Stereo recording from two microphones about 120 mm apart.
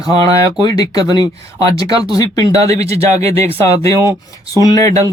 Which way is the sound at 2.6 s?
60° right (ahead or behind).